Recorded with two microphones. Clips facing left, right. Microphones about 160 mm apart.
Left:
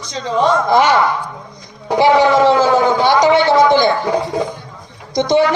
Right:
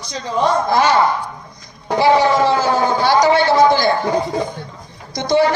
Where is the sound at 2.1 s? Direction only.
20° left (ahead or behind).